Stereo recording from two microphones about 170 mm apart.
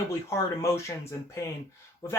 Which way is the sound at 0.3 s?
15° left (ahead or behind).